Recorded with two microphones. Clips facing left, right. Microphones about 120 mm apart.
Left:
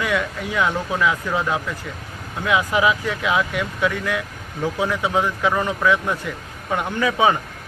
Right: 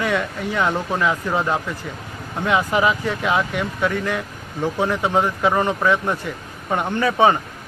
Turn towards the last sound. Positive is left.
turn(degrees=5)  # may be behind; listen again after turning